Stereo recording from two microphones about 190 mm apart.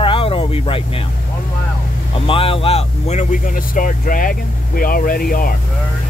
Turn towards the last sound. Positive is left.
turn(degrees=50)  # may be behind; listen again after turning